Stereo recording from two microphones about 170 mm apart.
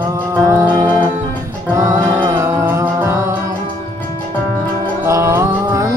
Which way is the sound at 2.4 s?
15° right (ahead or behind).